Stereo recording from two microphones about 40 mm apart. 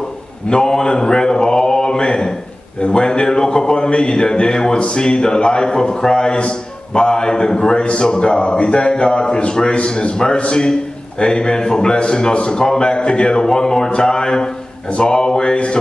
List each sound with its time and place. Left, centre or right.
0.5 s speech: centre
0.9 s mantra: left
2.8 s a man's voice: left